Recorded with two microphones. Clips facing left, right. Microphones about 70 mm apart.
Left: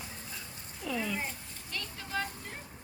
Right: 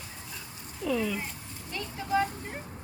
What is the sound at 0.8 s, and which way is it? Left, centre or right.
Cat, centre.